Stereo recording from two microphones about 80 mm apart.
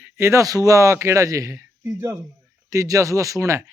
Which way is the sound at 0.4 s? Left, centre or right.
Right.